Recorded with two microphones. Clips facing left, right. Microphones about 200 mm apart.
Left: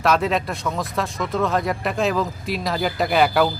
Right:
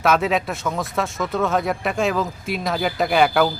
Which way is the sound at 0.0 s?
Centre (ahead or behind).